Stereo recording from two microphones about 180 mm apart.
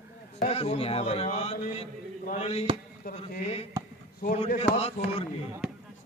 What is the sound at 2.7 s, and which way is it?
Speech, 30° right (ahead or behind).